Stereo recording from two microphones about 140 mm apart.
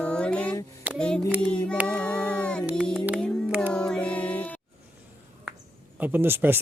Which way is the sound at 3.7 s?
5° left (ahead or behind).